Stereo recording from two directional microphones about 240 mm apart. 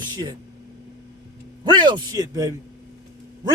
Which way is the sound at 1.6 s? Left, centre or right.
Centre.